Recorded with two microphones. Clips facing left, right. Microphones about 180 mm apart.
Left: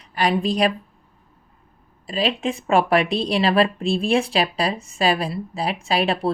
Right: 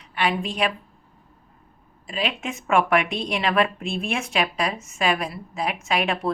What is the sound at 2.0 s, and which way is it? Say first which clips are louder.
Speech: left 5 dB; 35° left (ahead or behind).